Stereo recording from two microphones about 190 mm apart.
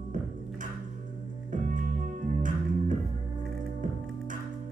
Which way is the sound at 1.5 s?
40° right (ahead or behind).